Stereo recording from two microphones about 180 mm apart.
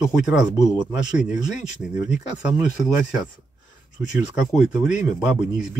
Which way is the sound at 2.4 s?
5° right (ahead or behind).